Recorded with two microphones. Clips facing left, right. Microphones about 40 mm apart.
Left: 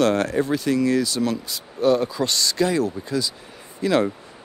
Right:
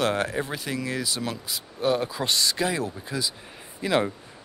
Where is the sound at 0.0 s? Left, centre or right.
Centre.